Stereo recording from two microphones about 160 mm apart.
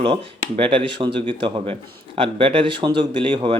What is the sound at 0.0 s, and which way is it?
A man's voice, 35° right (ahead or behind).